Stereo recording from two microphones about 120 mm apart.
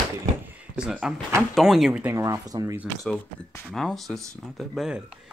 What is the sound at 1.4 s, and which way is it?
Speech, centre (ahead or behind).